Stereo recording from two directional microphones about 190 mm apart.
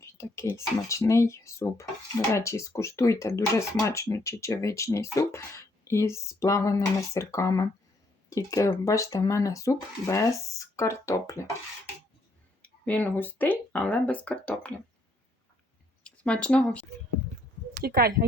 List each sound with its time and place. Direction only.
0.0 s speech: 15° left (ahead or behind)
12.6 s speech: 10° left (ahead or behind)
16.0 s speech: 5° left (ahead or behind)
17.7 s speech: 55° right (ahead or behind)